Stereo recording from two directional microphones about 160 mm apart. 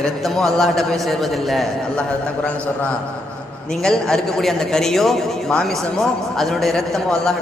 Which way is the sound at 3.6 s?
5° left (ahead or behind).